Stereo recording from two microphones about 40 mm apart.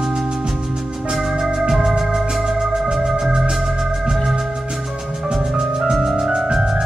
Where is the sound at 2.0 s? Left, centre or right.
Centre.